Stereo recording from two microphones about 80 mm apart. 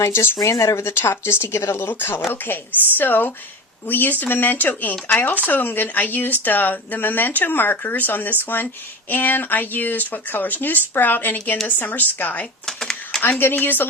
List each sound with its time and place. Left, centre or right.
0.0 s speech: left
12.6 s a sound: centre
13.4 s speech: left